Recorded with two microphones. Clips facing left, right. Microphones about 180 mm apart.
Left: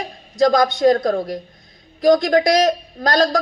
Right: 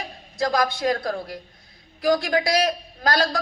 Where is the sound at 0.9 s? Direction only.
40° left (ahead or behind).